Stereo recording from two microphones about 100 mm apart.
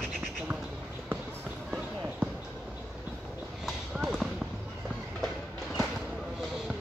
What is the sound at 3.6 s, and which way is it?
Clip-clop, centre (ahead or behind).